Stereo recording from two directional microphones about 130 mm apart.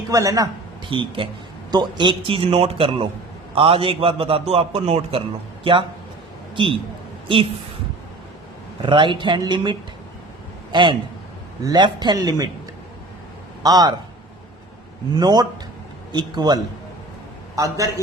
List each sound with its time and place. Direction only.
0.1 s speech: 25° right (ahead or behind)
0.9 s a man's voice: 40° right (ahead or behind)
8.9 s a man's voice: 40° right (ahead or behind)
13.6 s speech: 30° right (ahead or behind)
15.1 s a man's voice: 30° right (ahead or behind)